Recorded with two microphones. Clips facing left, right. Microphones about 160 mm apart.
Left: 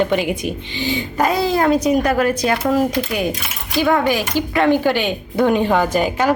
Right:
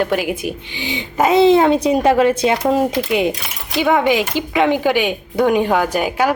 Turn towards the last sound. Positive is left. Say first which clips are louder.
# even
turn(degrees=-10)  # may be behind; listen again after turning